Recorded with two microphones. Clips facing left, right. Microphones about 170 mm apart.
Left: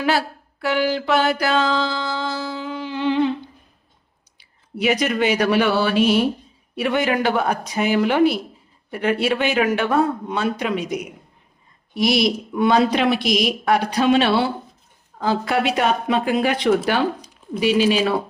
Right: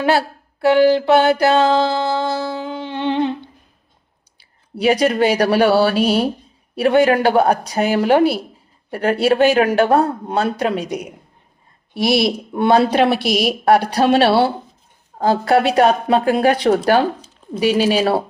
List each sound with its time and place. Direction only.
0.0 s mantra: 30° right (ahead or behind)
4.8 s speech: 35° right (ahead or behind)
17.2 s a sound: 10° left (ahead or behind)
17.6 s speech: 40° right (ahead or behind)